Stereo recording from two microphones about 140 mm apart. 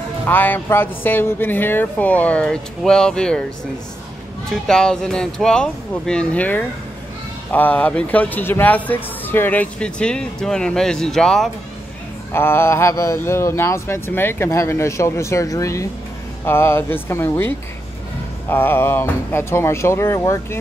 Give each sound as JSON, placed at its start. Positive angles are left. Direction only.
{"t": 0.3, "sound": "speech", "side_deg": 15}
{"t": 4.5, "sound": "speech", "side_deg": 5}
{"t": 12.3, "sound": "speech", "side_deg": 15}